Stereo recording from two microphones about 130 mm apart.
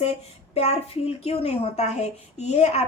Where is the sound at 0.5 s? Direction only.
55° left (ahead or behind).